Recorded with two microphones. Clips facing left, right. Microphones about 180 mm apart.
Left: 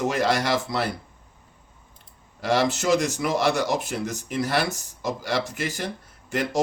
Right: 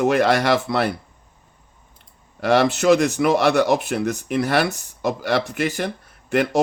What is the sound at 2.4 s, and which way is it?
Speech, 60° right (ahead or behind).